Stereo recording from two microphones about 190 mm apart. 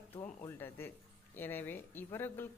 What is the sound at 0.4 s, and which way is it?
Speech, 10° left (ahead or behind).